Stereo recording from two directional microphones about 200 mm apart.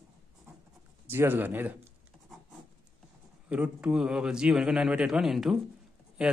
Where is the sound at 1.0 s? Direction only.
10° right (ahead or behind).